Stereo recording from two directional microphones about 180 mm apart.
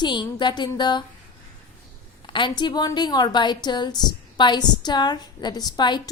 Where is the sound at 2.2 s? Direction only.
25° left (ahead or behind).